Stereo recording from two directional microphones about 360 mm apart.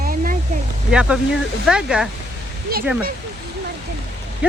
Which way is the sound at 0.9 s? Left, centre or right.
Centre.